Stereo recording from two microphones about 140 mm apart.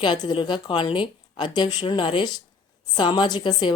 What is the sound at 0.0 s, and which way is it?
A woman's voice, 35° left (ahead or behind).